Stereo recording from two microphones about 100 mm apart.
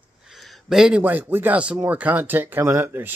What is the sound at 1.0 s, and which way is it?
Speech, 20° right (ahead or behind).